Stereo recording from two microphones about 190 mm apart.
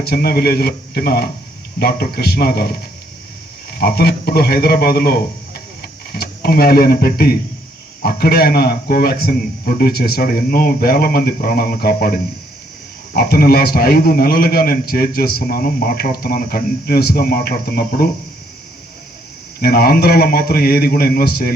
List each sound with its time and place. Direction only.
0.0 s a man's voice: 55° left (ahead or behind)
19.5 s a man's voice: 55° left (ahead or behind)